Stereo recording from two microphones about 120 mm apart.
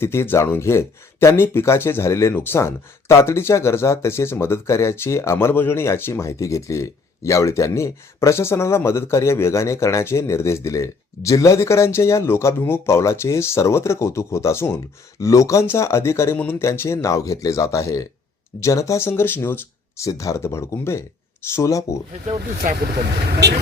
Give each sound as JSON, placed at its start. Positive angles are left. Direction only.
{"t": 0.0, "sound": "speech", "side_deg": 20}
{"t": 22.3, "sound": "speech", "side_deg": -90}